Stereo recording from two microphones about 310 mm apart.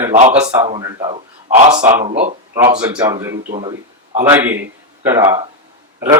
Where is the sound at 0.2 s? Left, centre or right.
Right.